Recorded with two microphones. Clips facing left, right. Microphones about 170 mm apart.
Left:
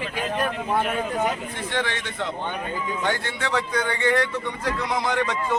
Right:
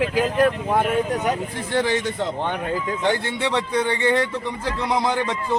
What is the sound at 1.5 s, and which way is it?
A man's voice, 35° right (ahead or behind).